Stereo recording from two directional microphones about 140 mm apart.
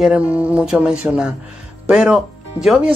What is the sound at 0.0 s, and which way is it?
A woman's voice, 10° right (ahead or behind).